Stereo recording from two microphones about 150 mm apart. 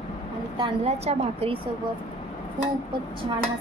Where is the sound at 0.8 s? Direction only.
40° right (ahead or behind).